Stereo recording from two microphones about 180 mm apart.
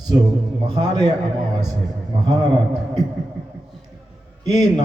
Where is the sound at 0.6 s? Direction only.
20° right (ahead or behind).